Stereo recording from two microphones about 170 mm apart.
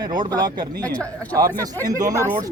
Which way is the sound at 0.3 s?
25° right (ahead or behind).